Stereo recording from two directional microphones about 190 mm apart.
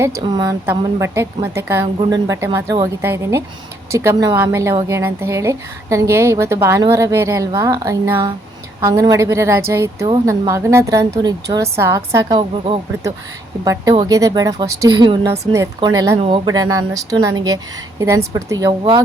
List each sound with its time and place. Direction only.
0.2 s a woman's voice: 25° right (ahead or behind)